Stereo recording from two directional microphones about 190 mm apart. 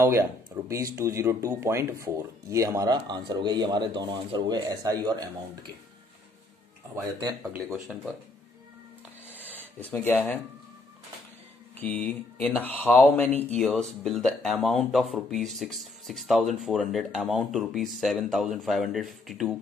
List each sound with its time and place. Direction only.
0.0 s speech: 15° right (ahead or behind)
7.0 s speech: 20° right (ahead or behind)
9.6 s speech: 10° left (ahead or behind)
11.7 s speech: 10° left (ahead or behind)